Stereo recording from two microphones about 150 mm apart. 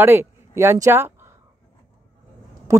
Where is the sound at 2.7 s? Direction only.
20° right (ahead or behind).